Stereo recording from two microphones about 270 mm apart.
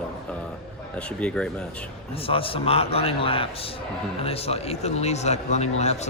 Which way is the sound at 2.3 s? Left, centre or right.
Centre.